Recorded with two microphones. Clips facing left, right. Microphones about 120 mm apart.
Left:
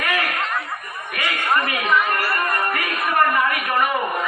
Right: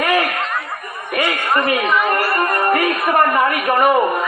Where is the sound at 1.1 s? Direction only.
30° right (ahead or behind).